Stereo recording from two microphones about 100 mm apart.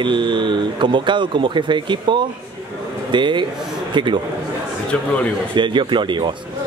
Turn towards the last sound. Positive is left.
turn(degrees=-50)  # may be behind; listen again after turning